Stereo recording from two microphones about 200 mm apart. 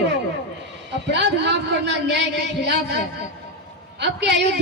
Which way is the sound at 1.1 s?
60° right (ahead or behind).